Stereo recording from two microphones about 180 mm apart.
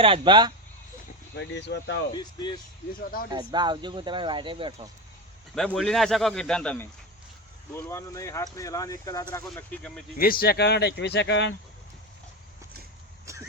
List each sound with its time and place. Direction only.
0.0 s speech: 30° right (ahead or behind)
1.4 s speech: 75° left (ahead or behind)
2.1 s speech: 25° left (ahead or behind)
3.0 s speech: 55° left (ahead or behind)
3.3 s speech: 25° right (ahead or behind)
5.5 s speech: centre (ahead or behind)
7.7 s speech: 15° left (ahead or behind)
9.3 s speech: 10° left (ahead or behind)
10.2 s speech: 55° left (ahead or behind); by 11.5 s 80° left
13.3 s a sound: 15° right (ahead or behind)